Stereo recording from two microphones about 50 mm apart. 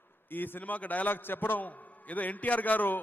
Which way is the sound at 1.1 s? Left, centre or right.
Left.